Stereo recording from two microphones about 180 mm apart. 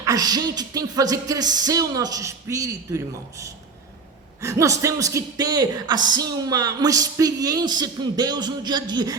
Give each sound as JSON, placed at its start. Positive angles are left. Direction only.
{"t": 0.0, "sound": "a man's voice", "side_deg": -20}